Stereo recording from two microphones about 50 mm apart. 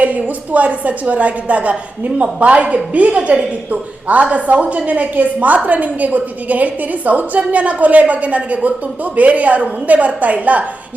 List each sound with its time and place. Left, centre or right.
0.0 s a woman's voice: right
3.2 s a woman's voice: centre